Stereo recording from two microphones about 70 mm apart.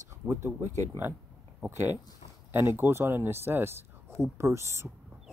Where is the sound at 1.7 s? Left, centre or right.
Right.